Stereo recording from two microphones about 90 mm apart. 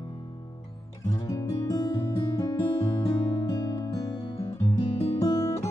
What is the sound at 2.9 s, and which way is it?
Music, 55° left (ahead or behind).